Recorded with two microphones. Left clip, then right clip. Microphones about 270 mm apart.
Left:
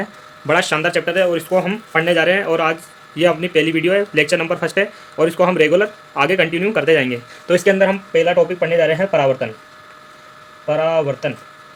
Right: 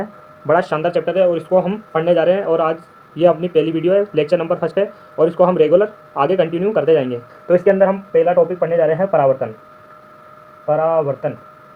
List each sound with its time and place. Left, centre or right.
0.0 s a sound: left
0.7 s speech: left
7.4 s speech: left
10.7 s speech: left